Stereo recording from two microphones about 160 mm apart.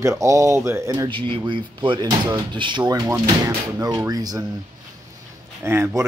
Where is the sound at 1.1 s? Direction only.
30° right (ahead or behind).